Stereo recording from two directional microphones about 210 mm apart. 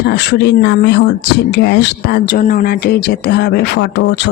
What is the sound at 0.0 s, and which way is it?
A woman's voice, 50° left (ahead or behind).